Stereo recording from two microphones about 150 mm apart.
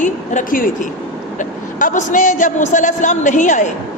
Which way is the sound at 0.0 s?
60° left (ahead or behind).